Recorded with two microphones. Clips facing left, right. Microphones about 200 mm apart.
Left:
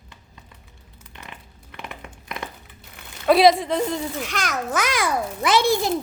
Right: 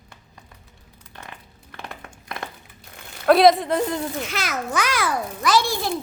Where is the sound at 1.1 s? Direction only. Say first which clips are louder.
Right 1 dB; 20° left (ahead or behind).